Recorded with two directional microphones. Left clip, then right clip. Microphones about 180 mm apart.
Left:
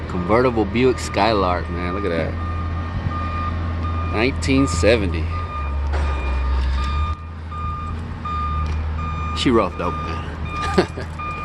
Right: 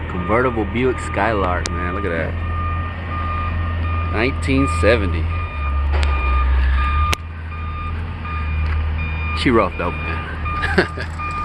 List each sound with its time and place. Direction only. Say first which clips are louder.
0.3 s speech: left 1 dB; 20° left (ahead or behind)
4.1 s speech: even; 15° left (ahead or behind)
9.3 s speech: right 2 dB; 5° left (ahead or behind)
10.8 s speech: right 1 dB; 20° left (ahead or behind)